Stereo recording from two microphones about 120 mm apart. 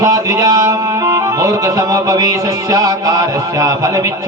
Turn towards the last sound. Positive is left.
turn(degrees=-30)  # may be behind; listen again after turning